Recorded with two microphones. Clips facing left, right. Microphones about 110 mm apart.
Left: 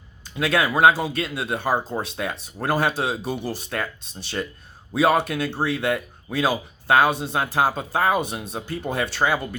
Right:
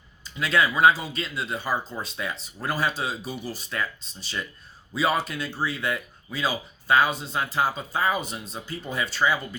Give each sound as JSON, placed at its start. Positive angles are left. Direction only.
{"t": 0.3, "sound": "speech", "side_deg": 60}